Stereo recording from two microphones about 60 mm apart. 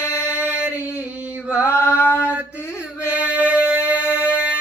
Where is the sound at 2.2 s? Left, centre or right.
Right.